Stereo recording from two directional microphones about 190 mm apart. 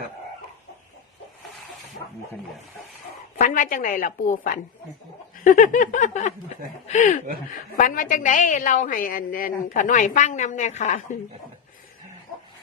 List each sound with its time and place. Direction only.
3.3 s a woman's voice: 45° left (ahead or behind)